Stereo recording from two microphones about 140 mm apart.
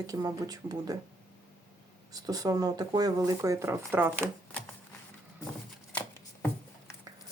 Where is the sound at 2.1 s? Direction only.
25° right (ahead or behind).